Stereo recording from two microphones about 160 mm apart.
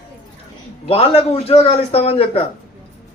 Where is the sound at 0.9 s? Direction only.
35° left (ahead or behind).